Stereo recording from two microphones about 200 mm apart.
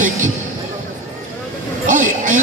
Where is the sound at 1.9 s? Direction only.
40° right (ahead or behind).